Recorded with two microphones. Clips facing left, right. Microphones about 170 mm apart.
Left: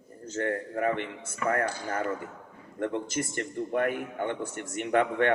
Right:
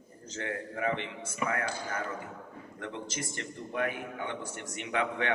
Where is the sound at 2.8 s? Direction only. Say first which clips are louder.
Left 9 dB; 50° left (ahead or behind).